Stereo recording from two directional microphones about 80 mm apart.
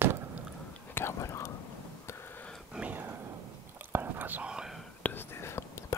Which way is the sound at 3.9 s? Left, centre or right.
Right.